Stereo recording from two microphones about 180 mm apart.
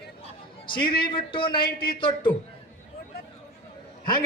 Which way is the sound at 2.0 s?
30° left (ahead or behind).